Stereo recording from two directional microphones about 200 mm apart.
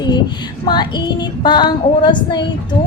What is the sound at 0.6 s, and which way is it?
A woman's voice, 20° left (ahead or behind).